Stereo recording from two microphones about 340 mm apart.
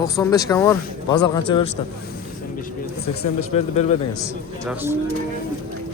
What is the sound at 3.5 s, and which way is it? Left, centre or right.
Speech, centre.